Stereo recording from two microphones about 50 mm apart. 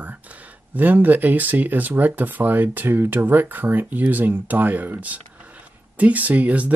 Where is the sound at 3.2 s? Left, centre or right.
Right.